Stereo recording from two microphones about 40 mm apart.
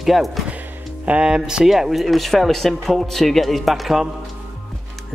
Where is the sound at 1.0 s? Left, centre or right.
Right.